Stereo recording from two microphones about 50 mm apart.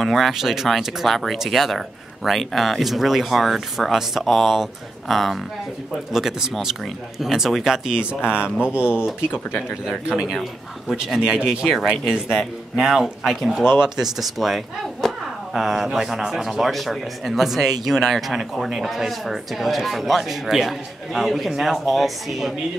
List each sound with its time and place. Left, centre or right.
0.0 s speech: centre
0.7 s speech: centre; by 8.9 s right
10.0 s speech: centre
10.9 s speech: centre
13.7 s speech: centre